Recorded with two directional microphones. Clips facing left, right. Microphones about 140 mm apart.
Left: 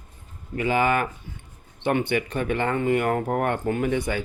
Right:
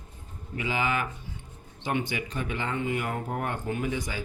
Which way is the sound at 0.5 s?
50° left (ahead or behind).